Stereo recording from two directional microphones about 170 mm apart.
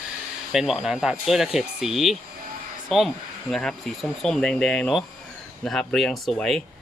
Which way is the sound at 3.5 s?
5° left (ahead or behind).